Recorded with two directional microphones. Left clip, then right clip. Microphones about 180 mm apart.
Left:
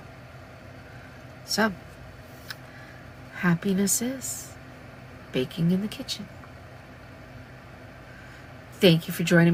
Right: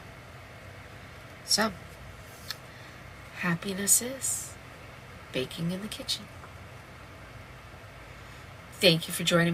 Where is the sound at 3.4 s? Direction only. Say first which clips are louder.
Left 5 dB; 30° left (ahead or behind).